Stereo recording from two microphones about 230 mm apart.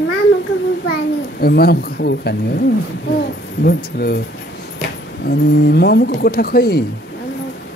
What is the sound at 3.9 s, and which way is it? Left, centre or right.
Speech, left.